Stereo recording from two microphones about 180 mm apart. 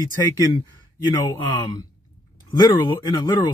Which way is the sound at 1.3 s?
25° left (ahead or behind).